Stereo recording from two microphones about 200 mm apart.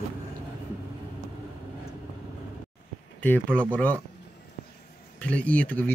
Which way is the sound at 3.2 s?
5° left (ahead or behind).